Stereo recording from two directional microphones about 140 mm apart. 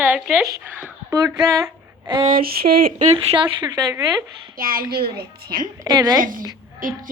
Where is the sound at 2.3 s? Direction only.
90° right.